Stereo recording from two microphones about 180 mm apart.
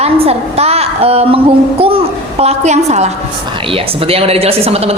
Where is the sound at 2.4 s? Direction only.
35° right (ahead or behind).